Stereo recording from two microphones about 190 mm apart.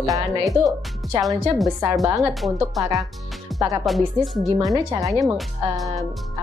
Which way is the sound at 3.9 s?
Centre (ahead or behind).